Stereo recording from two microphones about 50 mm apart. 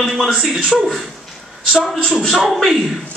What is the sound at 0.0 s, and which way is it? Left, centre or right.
Speech, centre.